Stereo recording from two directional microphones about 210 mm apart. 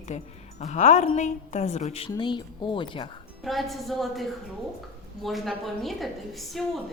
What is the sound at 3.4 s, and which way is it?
A woman's voice, centre (ahead or behind).